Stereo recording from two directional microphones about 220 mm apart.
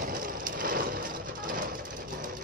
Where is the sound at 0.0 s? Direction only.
40° right (ahead or behind).